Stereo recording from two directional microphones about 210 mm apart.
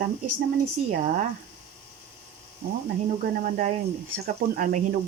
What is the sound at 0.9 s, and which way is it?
Speech, 40° right (ahead or behind).